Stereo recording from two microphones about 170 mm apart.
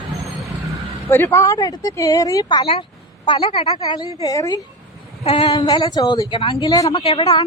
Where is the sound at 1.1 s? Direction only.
15° left (ahead or behind).